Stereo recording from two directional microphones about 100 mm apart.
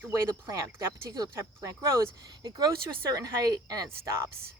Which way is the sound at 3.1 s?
40° right (ahead or behind).